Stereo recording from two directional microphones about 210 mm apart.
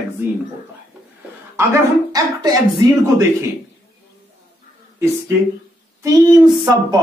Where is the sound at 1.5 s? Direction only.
15° right (ahead or behind).